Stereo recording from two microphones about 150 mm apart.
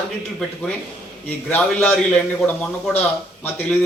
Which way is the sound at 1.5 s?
10° left (ahead or behind).